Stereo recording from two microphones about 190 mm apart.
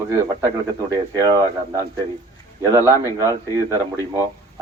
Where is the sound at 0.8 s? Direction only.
15° right (ahead or behind).